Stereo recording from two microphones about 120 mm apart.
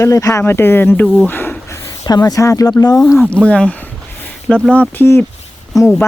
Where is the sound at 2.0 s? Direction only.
30° left (ahead or behind).